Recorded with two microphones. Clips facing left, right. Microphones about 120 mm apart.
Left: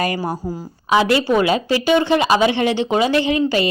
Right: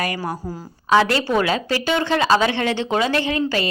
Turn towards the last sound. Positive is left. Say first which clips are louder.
# left 4 dB
turn(degrees=20)  # may be behind; listen again after turning